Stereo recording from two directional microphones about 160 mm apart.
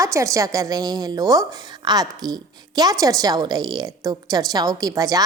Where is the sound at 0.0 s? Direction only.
20° right (ahead or behind).